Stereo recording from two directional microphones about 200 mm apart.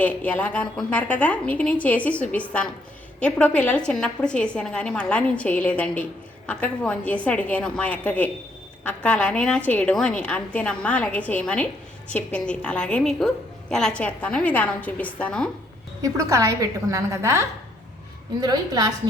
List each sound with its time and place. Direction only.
0.0 s a woman's voice: 5° left (ahead or behind)
16.0 s a woman's voice: 15° right (ahead or behind)